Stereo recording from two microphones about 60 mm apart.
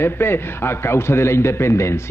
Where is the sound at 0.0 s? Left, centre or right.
Left.